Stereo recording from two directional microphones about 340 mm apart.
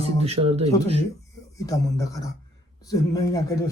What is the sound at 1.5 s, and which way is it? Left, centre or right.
Speech, centre.